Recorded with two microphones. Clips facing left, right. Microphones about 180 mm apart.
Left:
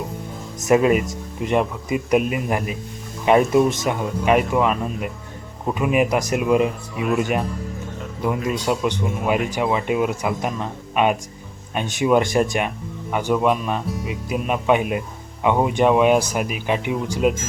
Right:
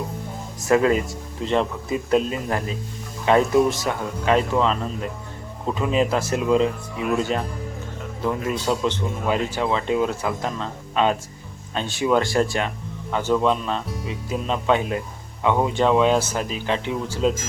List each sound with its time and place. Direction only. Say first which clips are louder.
0.6 s speech: left 2 dB; 20° left (ahead or behind)